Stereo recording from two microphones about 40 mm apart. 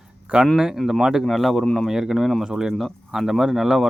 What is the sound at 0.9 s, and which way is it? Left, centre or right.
Speech, centre.